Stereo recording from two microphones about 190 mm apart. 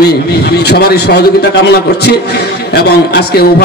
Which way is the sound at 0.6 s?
60° left (ahead or behind).